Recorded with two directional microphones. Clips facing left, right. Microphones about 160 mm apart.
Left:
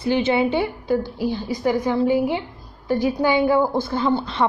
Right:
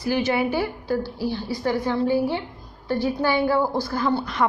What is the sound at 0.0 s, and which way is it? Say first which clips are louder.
A woman's voice: left 3 dB; 25° left (ahead or behind).